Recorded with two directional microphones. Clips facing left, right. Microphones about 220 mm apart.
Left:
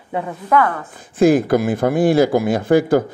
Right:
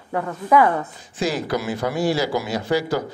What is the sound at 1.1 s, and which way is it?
Speech, 55° left (ahead or behind).